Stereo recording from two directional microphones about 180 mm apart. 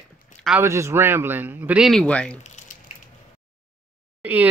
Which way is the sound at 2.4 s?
40° left (ahead or behind).